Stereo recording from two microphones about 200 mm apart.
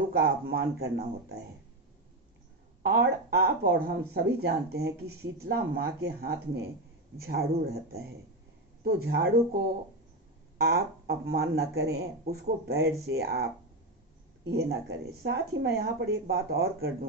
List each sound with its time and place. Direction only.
0.1 s speech: 50° right (ahead or behind)
2.8 s speech: 55° right (ahead or behind)
10.6 s speech: 50° right (ahead or behind)
14.5 s speech: 55° right (ahead or behind)